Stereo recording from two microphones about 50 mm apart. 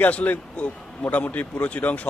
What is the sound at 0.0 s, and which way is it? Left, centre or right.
A man's voice, left.